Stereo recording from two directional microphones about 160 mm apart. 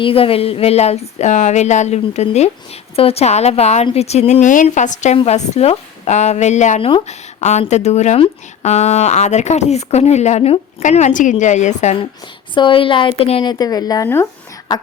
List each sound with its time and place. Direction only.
0.0 s a woman's voice: 35° left (ahead or behind)
12.5 s a woman's voice: 30° left (ahead or behind)